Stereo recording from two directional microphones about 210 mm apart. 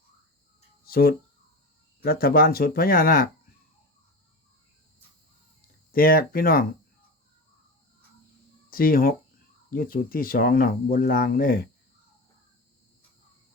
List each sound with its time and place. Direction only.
0.9 s speech: 45° left (ahead or behind)
5.9 s speech: 45° left (ahead or behind)
8.7 s speech: 45° left (ahead or behind)